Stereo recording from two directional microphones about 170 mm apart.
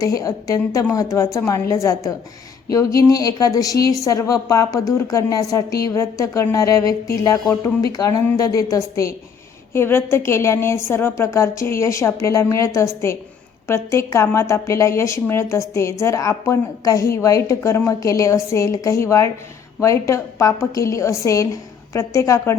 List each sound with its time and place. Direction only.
0.0 s a woman's voice: 20° left (ahead or behind)